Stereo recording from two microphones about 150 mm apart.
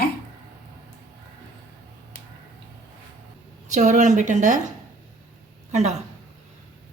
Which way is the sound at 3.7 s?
55° right (ahead or behind).